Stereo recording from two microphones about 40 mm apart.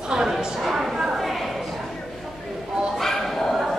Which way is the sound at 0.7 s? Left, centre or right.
Centre.